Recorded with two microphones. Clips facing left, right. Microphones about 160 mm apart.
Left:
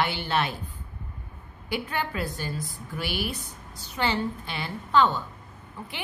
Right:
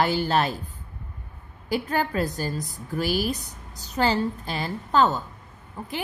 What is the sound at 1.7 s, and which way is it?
A woman's voice, 40° right (ahead or behind).